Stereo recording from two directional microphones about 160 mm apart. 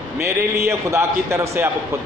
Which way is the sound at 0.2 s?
15° right (ahead or behind).